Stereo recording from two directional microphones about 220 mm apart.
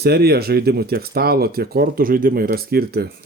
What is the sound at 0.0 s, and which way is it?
Speech, 45° right (ahead or behind).